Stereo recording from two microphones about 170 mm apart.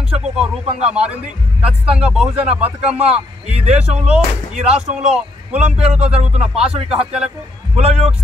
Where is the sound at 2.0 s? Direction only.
5° right (ahead or behind).